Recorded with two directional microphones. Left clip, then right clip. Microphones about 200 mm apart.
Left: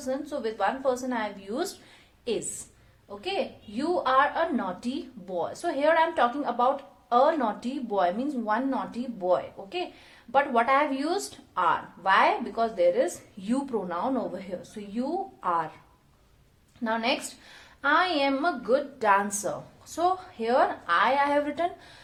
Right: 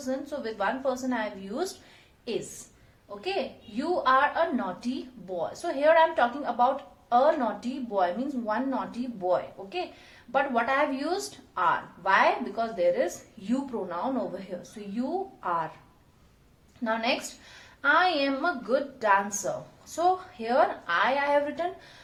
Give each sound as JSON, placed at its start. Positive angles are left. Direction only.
{"t": 0.0, "sound": "a woman's voice", "side_deg": 30}
{"t": 16.8, "sound": "a woman's voice", "side_deg": 30}